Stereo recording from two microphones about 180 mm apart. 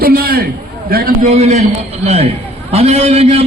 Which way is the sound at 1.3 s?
40° right (ahead or behind).